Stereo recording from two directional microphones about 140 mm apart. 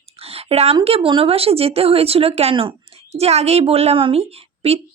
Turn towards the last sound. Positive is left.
turn(degrees=-45)  # may be behind; listen again after turning